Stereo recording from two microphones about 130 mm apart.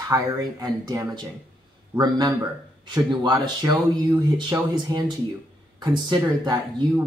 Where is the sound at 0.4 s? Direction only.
30° right (ahead or behind).